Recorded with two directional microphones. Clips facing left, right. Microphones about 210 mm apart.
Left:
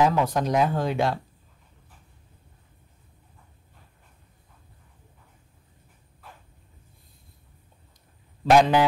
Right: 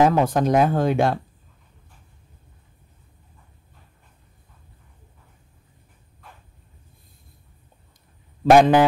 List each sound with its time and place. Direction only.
0.0 s speech: 50° right (ahead or behind)
8.5 s speech: 50° right (ahead or behind)